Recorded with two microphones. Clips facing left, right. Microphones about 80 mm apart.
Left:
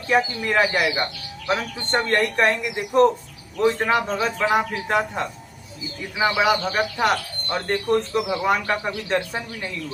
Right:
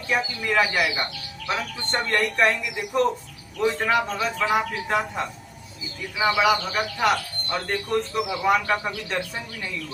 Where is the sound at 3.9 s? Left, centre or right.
Left.